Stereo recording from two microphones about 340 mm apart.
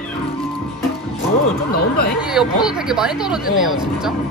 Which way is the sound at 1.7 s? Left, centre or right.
Left.